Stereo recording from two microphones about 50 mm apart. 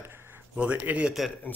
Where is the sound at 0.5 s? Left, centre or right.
Right.